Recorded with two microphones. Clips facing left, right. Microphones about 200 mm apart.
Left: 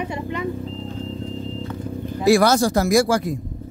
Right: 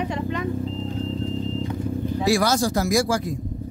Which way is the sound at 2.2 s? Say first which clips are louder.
Left 6 dB; 55° left (ahead or behind).